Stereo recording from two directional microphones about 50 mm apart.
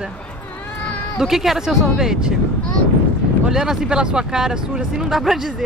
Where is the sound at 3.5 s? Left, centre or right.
Centre.